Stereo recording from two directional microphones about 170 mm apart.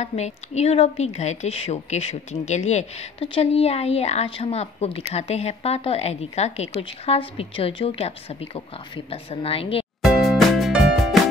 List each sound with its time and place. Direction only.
0.0 s speech: 40° left (ahead or behind)
10.0 s music: centre (ahead or behind)